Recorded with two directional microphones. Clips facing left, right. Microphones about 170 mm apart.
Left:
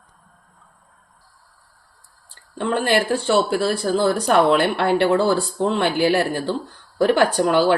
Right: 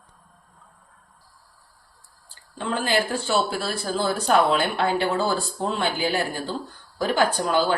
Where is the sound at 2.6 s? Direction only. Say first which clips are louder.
Left 5 dB; 65° left (ahead or behind).